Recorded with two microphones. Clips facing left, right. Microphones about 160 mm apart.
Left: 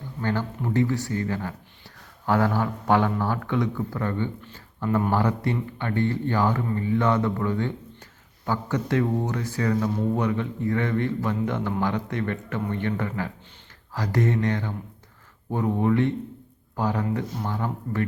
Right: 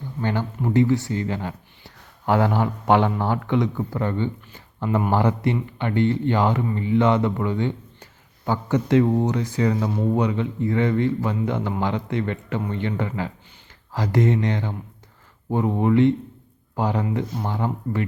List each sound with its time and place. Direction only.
0.2 s speech: 20° right (ahead or behind)